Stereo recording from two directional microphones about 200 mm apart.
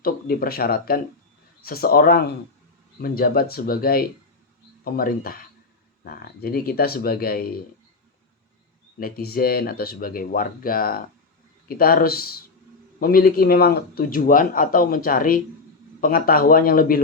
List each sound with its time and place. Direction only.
0.0 s speech: 50° left (ahead or behind)
9.0 s speech: 50° left (ahead or behind)